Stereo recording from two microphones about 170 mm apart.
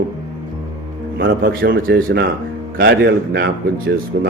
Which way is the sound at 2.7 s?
85° right.